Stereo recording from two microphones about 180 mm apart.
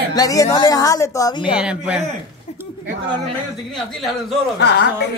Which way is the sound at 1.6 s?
5° right (ahead or behind).